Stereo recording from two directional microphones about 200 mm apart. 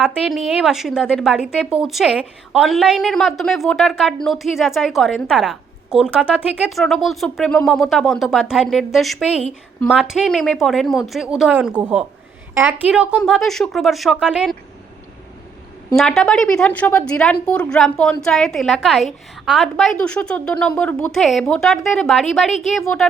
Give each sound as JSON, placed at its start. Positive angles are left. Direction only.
{"t": 0.0, "sound": "a woman's voice", "side_deg": 0}
{"t": 16.0, "sound": "a woman's voice", "side_deg": 0}